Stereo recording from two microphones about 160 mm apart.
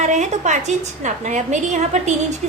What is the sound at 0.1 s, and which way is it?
A woman's voice, 50° right (ahead or behind).